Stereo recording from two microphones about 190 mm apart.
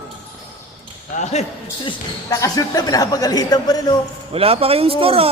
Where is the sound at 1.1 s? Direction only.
40° left (ahead or behind).